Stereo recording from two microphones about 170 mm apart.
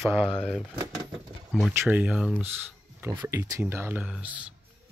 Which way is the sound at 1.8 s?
10° right (ahead or behind).